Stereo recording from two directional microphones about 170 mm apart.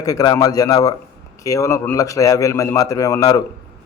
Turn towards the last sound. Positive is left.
turn(degrees=20)  # may be behind; listen again after turning